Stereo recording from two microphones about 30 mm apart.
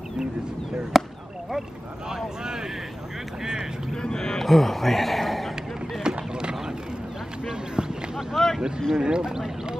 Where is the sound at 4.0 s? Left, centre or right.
Left.